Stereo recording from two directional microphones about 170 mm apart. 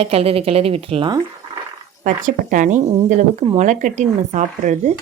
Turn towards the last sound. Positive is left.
turn(degrees=-45)  # may be behind; listen again after turning